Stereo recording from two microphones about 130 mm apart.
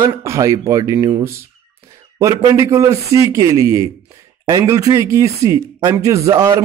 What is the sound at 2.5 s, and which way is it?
A man's voice, 25° right (ahead or behind).